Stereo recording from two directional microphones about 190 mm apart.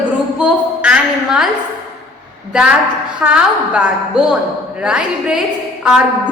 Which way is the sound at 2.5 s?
5° right (ahead or behind).